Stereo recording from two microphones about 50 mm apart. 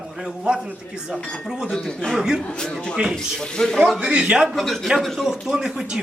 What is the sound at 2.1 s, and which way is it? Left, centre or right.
Speech, centre.